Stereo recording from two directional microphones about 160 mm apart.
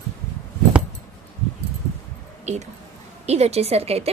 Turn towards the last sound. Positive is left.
turn(degrees=-40)  # may be behind; listen again after turning